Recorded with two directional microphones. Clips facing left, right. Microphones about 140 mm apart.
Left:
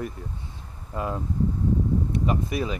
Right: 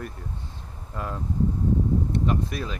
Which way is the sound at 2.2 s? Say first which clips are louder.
Left 1 dB; centre (ahead or behind).